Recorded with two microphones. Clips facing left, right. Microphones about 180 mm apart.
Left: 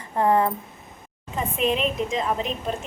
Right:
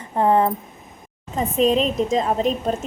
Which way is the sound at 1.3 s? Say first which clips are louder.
Right 6 dB; 40° right (ahead or behind).